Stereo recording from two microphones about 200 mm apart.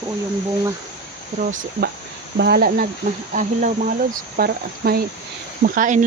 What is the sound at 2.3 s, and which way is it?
Speech, 55° right (ahead or behind).